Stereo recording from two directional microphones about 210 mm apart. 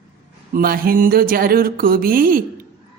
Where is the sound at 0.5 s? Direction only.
45° right (ahead or behind).